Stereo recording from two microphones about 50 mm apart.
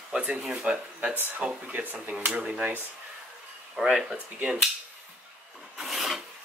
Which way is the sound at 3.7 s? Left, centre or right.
Centre.